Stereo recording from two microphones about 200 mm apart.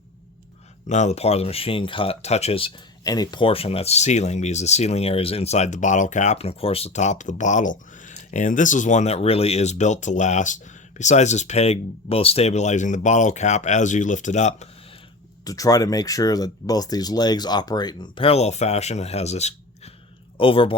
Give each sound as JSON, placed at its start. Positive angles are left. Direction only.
{"t": 0.9, "sound": "speech", "side_deg": 35}
{"t": 15.4, "sound": "speech", "side_deg": 15}